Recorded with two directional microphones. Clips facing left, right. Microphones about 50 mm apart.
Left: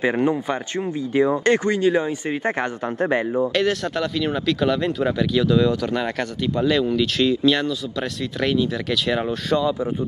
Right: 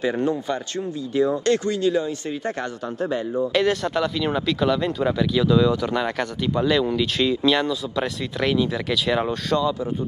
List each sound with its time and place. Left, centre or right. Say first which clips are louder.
0.0 s speech: left 3 dB; left
3.5 s speech: right 1 dB; centre
8.4 s speech: even; centre